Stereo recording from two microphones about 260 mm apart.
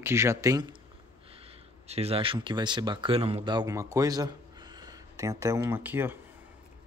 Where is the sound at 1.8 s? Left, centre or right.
Right; by 6.1 s centre.